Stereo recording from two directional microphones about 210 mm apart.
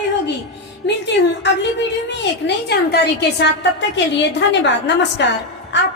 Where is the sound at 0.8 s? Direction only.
55° left (ahead or behind).